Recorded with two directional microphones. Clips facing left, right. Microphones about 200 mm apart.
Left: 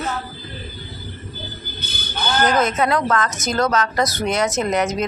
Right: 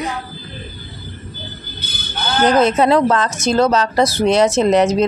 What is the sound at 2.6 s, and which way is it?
Speech, 30° right (ahead or behind).